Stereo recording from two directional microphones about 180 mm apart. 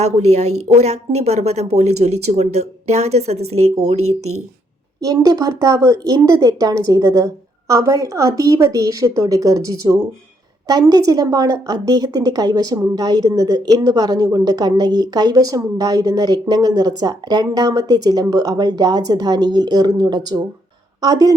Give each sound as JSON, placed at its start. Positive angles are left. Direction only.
{"t": 0.0, "sound": "speech", "side_deg": -40}
{"t": 5.0, "sound": "a woman's voice", "side_deg": -20}